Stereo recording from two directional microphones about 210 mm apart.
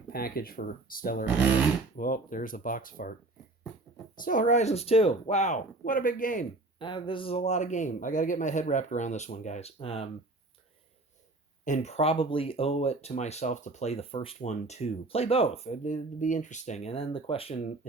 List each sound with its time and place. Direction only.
0.1 s a man's voice: 45° left (ahead or behind)
4.2 s a man's voice: 40° left (ahead or behind)
6.7 s a man's voice: 20° left (ahead or behind)
11.6 s speech: 35° left (ahead or behind)